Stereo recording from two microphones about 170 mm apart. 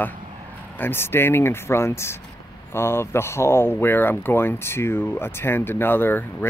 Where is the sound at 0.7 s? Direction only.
15° left (ahead or behind).